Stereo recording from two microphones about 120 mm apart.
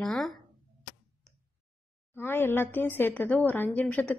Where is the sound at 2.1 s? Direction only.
20° left (ahead or behind).